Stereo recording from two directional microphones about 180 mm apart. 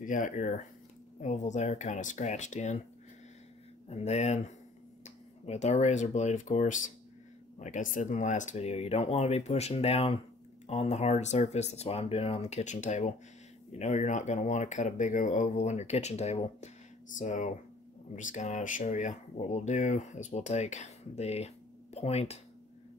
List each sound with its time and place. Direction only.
0.0 s speech: 45° left (ahead or behind)
3.9 s speech: 40° left (ahead or behind)